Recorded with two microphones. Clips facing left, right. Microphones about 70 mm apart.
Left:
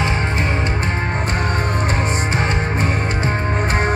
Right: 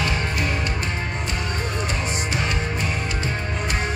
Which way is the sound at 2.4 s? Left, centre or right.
Left.